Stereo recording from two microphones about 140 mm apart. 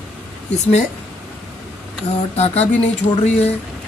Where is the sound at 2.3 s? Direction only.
45° left (ahead or behind).